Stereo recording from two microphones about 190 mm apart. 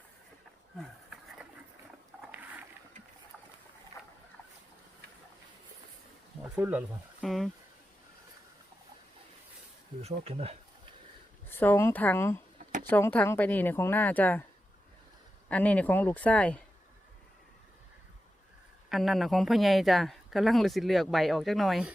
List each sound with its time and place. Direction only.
2.3 s a sound: 10° right (ahead or behind)
6.4 s speech: 10° right (ahead or behind)
10.0 s speech: 35° right (ahead or behind)
11.4 s speech: 10° left (ahead or behind)
15.4 s speech: 5° left (ahead or behind)
18.9 s speech: centre (ahead or behind)